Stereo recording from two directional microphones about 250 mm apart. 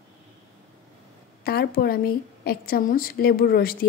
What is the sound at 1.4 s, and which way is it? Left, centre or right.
A woman's voice, left.